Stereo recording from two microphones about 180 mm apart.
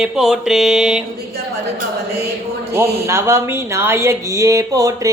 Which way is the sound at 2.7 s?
15° right (ahead or behind).